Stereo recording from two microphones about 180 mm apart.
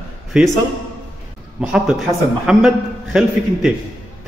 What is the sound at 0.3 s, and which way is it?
Speech, 5° right (ahead or behind).